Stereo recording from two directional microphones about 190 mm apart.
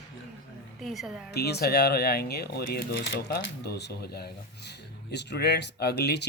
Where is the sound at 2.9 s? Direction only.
70° left (ahead or behind).